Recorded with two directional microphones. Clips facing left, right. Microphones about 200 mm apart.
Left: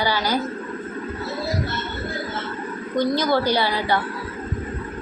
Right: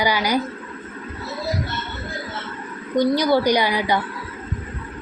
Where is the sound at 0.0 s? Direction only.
15° right (ahead or behind).